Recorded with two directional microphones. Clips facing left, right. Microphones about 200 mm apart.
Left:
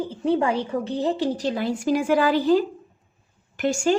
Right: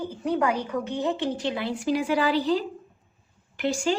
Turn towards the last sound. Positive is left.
turn(degrees=50)  # may be behind; listen again after turning